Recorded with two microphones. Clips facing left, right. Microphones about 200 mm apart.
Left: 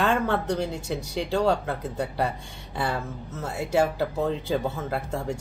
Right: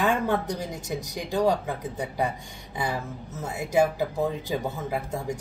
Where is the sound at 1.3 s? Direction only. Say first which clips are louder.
Even; 15° right (ahead or behind).